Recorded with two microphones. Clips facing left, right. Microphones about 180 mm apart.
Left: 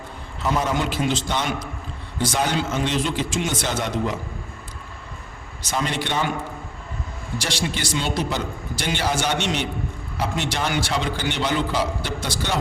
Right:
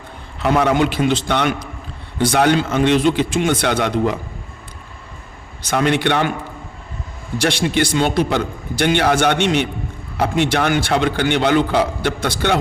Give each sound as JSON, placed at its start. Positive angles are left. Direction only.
{"t": 0.4, "sound": "a man's voice", "side_deg": -65}
{"t": 5.6, "sound": "a man's voice", "side_deg": -65}
{"t": 7.3, "sound": "a man's voice", "side_deg": -55}